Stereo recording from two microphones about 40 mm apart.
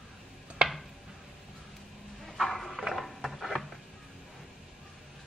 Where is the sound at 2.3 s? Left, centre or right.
Centre.